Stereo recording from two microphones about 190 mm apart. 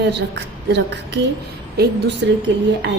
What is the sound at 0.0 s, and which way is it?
A woman's voice, 65° right (ahead or behind).